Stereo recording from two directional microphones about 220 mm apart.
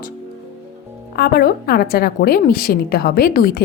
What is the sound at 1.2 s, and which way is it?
A woman's voice, 45° left (ahead or behind).